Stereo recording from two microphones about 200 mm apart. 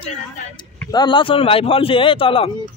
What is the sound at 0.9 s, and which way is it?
A man's voice, 20° left (ahead or behind).